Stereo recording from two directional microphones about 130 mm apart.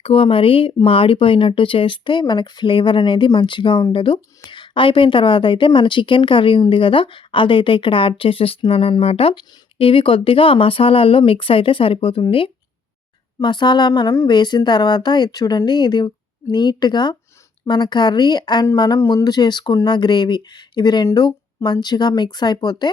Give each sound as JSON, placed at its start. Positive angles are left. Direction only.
{"t": 0.0, "sound": "speech", "side_deg": 45}